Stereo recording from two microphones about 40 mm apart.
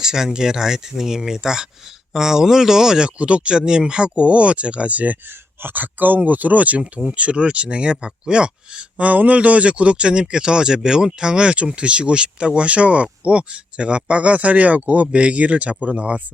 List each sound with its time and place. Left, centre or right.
0.0 s speech: centre
3.2 s speech: right